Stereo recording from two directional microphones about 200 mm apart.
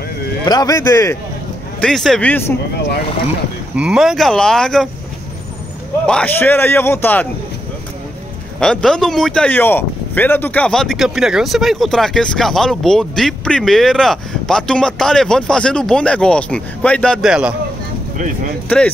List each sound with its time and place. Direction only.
0.5 s a man's voice: 20° left (ahead or behind)
1.8 s speech: centre (ahead or behind)
3.7 s speech: 5° right (ahead or behind)
6.0 s a man's voice: 5° left (ahead or behind)
8.5 s speech: 5° left (ahead or behind)